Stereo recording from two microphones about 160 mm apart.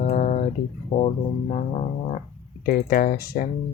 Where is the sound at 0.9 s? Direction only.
45° left (ahead or behind).